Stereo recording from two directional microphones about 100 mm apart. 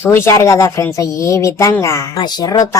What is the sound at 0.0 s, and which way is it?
Speech, 25° left (ahead or behind).